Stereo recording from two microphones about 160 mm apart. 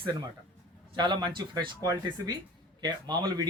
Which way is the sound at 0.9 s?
30° right (ahead or behind).